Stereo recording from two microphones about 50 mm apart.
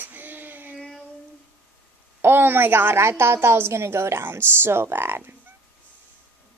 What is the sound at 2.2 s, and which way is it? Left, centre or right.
A woman's voice, right.